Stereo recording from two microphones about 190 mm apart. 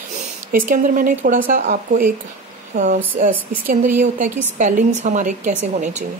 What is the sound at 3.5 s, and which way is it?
A woman's voice, 50° right (ahead or behind).